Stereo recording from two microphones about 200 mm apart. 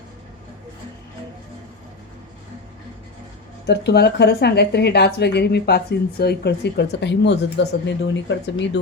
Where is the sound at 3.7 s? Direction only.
55° left (ahead or behind).